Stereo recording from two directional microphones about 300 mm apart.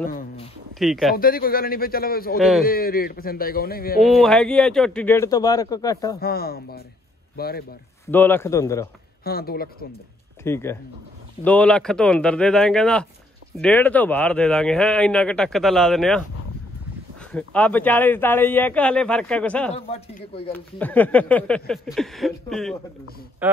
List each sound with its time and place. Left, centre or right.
0.1 s speech: left
0.7 s speech: centre
1.1 s a man's voice: left
2.3 s speech: centre
2.6 s a man's voice: left
4.0 s a man's voice: centre
6.2 s speech: left
8.1 s a man's voice: centre
9.2 s speech: left
10.4 s a man's voice: centre
17.3 s speech: centre
19.7 s a man's voice: centre
20.5 s speech: centre